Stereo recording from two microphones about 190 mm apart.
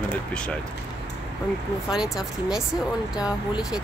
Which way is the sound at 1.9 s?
Centre (ahead or behind).